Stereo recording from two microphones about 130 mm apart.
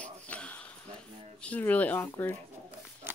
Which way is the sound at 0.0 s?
10° left (ahead or behind).